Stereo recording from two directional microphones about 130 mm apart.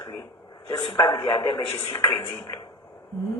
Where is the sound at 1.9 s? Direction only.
25° left (ahead or behind).